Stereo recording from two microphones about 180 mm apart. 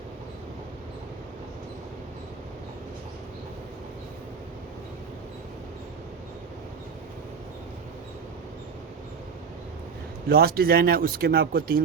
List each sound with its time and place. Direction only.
10.2 s speech: 60° right (ahead or behind)